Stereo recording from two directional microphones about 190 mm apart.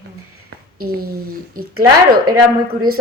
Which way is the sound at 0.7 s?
50° right (ahead or behind).